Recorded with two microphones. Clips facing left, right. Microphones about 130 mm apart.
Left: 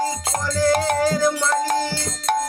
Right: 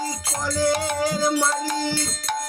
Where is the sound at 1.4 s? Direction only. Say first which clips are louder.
Left 4 dB; 50° left (ahead or behind).